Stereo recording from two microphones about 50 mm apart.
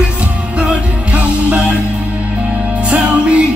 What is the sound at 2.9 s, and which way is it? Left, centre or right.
Music, right.